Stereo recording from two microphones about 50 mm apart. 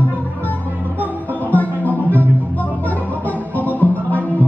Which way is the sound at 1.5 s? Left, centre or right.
Left.